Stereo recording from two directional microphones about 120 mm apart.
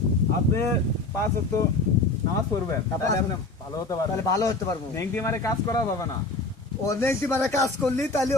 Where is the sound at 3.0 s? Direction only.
25° left (ahead or behind).